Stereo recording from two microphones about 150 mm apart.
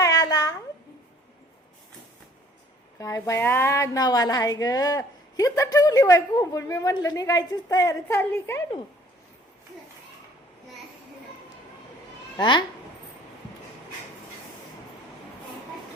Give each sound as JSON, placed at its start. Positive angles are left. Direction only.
{"t": 0.0, "sound": "a sound", "side_deg": 25}
{"t": 3.0, "sound": "a woman's voice", "side_deg": 20}
{"t": 12.4, "sound": "speech", "side_deg": 30}